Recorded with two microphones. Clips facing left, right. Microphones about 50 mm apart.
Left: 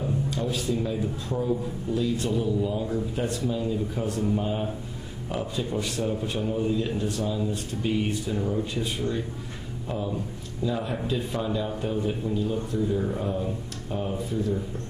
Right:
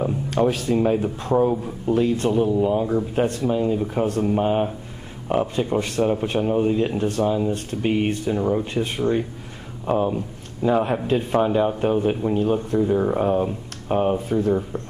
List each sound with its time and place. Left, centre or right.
0.0 s speech: right